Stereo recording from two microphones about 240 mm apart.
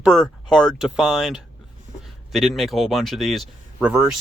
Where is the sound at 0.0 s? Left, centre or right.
Centre.